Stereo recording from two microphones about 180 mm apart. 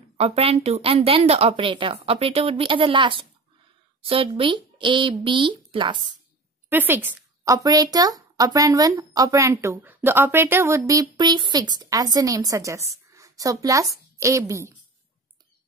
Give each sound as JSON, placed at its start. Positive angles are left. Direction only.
{"t": 0.2, "sound": "a woman's voice", "side_deg": -35}
{"t": 6.7, "sound": "speech", "side_deg": -10}